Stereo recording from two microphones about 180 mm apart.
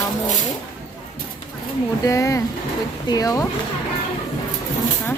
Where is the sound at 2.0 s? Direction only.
15° left (ahead or behind).